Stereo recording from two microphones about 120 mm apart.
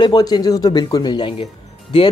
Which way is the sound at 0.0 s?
35° left (ahead or behind).